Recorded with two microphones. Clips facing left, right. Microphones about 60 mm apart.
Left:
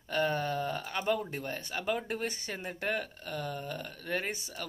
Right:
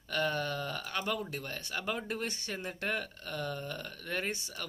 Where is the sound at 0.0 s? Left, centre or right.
Centre.